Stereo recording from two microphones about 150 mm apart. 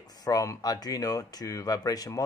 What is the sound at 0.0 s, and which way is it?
Speech, 25° left (ahead or behind).